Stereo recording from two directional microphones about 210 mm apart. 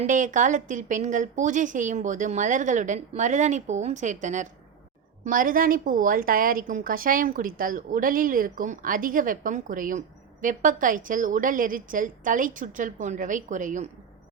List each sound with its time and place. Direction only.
0.1 s a woman's voice: 35° right (ahead or behind)